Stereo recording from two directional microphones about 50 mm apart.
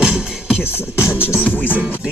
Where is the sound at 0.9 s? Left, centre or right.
Left.